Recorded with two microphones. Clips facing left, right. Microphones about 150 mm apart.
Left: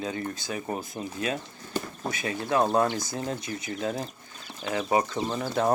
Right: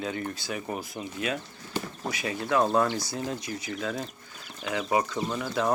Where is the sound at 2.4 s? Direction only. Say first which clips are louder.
Even; 25° left (ahead or behind).